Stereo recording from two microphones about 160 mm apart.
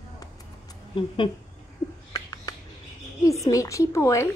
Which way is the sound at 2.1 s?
25° left (ahead or behind).